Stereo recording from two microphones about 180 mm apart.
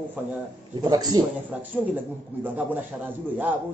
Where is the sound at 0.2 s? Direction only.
10° right (ahead or behind).